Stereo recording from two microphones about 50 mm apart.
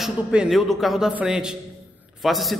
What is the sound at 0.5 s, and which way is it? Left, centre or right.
A man's voice, centre.